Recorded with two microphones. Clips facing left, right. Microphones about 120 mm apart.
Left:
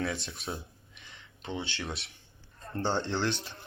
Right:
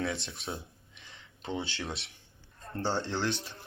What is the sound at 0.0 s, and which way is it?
Speech, 25° right (ahead or behind).